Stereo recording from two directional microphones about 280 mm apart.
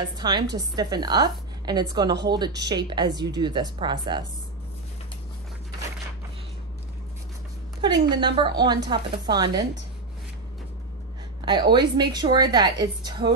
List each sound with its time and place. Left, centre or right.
0.2 s a woman's voice: centre
8.1 s a woman's voice: centre
11.4 s a woman's voice: centre